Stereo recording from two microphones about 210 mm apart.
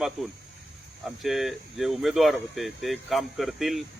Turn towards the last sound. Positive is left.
turn(degrees=0)  # may be behind; listen again after turning